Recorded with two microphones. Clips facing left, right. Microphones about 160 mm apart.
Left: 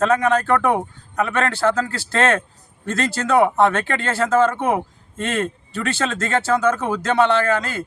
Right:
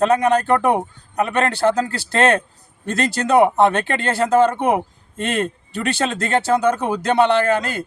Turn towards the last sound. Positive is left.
turn(degrees=-15)  # may be behind; listen again after turning